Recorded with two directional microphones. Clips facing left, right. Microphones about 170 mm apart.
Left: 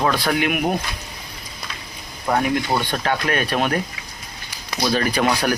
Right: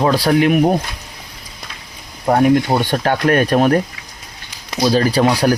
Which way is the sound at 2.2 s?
35° right (ahead or behind).